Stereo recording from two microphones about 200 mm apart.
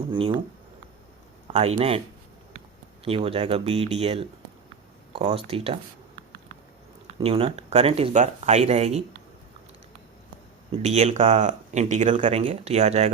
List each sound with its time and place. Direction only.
0.1 s speech: 25° right (ahead or behind)
1.5 s speech: 30° right (ahead or behind)
3.0 s speech: 30° right (ahead or behind)
7.2 s speech: 30° right (ahead or behind)
10.7 s speech: 35° right (ahead or behind)